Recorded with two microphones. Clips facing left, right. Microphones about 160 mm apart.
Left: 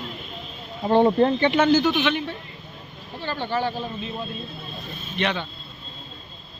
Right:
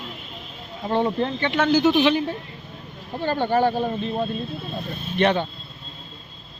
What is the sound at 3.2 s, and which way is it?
Speech, 50° right (ahead or behind).